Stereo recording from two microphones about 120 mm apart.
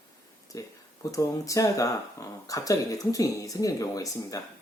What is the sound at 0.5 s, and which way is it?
Speech, 30° left (ahead or behind).